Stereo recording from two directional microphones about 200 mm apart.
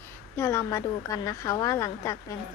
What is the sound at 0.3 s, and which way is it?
Speech, 15° left (ahead or behind).